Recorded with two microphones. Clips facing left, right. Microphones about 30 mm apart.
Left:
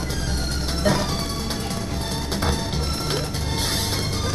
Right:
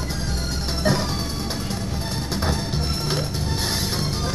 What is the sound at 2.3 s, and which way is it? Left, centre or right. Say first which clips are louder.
Music: even; left.